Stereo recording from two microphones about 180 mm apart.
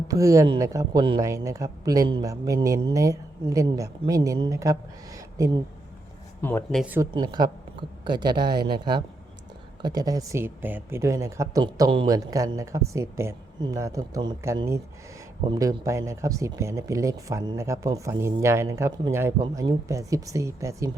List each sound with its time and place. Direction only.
0.1 s a man's voice: 15° right (ahead or behind)
6.4 s speech: 5° left (ahead or behind)
6.8 s speech: 10° right (ahead or behind)
7.1 s a man's voice: 25° right (ahead or behind)